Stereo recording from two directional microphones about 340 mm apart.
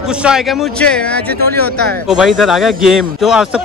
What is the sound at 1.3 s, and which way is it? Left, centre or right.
Speech, right.